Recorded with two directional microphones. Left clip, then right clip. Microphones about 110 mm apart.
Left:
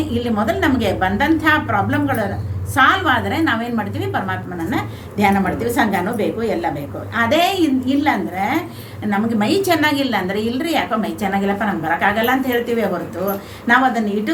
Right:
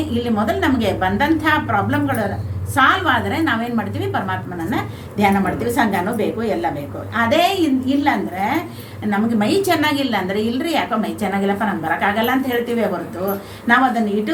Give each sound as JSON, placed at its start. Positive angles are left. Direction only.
{"t": 0.1, "sound": "a woman's voice", "side_deg": 35}